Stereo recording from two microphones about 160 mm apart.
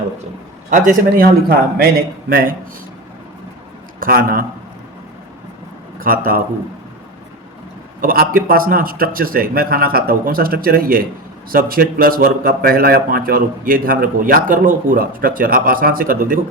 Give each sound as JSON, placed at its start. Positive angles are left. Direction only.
{"t": 0.7, "sound": "speech", "side_deg": -60}
{"t": 4.0, "sound": "speech", "side_deg": -65}
{"t": 6.0, "sound": "a man's voice", "side_deg": -65}
{"t": 8.0, "sound": "speech", "side_deg": -65}